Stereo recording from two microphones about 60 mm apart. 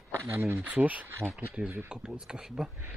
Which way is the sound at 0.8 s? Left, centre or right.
Right.